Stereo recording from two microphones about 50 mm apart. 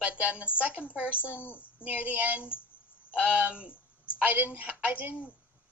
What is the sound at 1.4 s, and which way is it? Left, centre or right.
Speech, left.